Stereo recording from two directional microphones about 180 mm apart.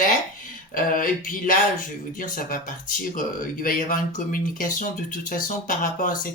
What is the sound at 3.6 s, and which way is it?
Speech, 50° left (ahead or behind).